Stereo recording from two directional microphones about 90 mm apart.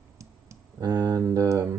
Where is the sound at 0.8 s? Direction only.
50° right (ahead or behind).